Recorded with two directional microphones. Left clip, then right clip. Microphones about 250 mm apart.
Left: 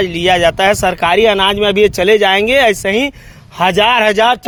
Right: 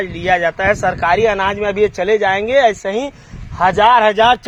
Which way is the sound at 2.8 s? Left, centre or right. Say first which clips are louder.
Left 5 dB; left.